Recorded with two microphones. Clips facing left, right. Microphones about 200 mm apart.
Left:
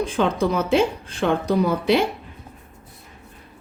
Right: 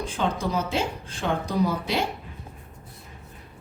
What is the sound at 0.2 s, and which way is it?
Speech, 65° left (ahead or behind).